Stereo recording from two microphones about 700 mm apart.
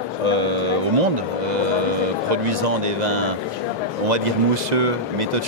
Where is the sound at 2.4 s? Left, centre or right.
Right.